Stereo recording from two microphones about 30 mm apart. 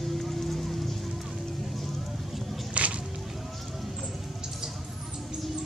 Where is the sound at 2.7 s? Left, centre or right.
Right.